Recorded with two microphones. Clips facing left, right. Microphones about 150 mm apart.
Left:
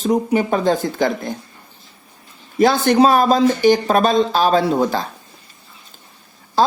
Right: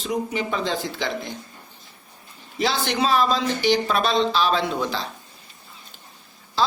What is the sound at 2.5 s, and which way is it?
Speech, 50° left (ahead or behind).